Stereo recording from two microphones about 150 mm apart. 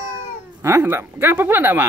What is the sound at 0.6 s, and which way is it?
Speech, 15° right (ahead or behind).